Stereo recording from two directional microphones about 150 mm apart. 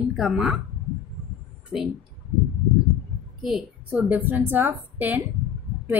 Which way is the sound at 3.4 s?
5° right (ahead or behind).